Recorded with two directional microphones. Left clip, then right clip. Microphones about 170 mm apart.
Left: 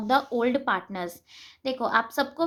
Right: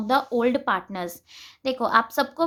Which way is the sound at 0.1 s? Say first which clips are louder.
Right 2 dB; 20° right (ahead or behind).